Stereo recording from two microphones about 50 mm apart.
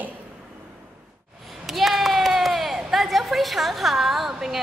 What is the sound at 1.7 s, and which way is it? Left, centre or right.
A woman's voice, centre.